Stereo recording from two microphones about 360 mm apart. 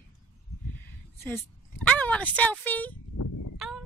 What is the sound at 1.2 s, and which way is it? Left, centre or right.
Speech, centre.